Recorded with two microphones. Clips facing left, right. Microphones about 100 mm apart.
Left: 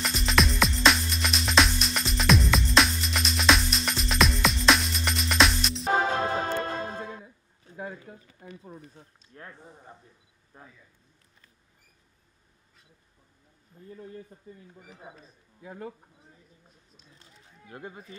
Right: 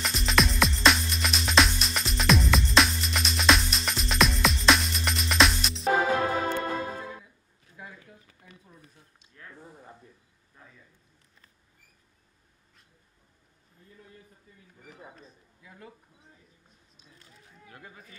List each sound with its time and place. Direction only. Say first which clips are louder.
0.0 s music: even; centre (ahead or behind)
5.9 s music: right 1 dB; 25° left (ahead or behind)
9.3 s a sound: left 5 dB; 45° left (ahead or behind)
10.5 s speech: left 4 dB; 40° left (ahead or behind)
14.5 s speech: left 11 dB; 30° left (ahead or behind)
14.9 s speech: right 2 dB; centre (ahead or behind)
15.6 s speech: left 10 dB; 40° left (ahead or behind)
17.1 s a sound: right 1 dB; 30° left (ahead or behind)